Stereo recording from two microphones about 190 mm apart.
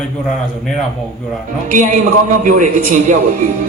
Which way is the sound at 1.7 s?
45° right (ahead or behind).